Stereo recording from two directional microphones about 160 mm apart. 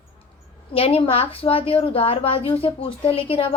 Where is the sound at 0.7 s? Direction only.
40° left (ahead or behind).